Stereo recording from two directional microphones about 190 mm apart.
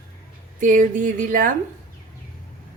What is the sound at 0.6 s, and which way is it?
Speech, 45° right (ahead or behind).